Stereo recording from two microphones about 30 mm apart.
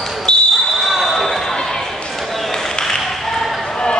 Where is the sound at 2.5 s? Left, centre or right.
Centre.